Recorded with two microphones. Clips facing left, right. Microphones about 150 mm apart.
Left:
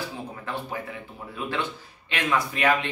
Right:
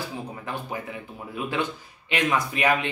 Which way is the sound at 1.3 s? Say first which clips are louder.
Right 2 dB; 15° right (ahead or behind).